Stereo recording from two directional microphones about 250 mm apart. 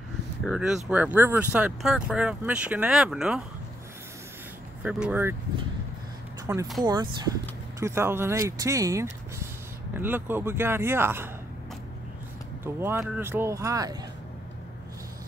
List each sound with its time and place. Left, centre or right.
0.5 s speech: centre
4.8 s speech: centre
6.4 s speech: centre
12.6 s speech: centre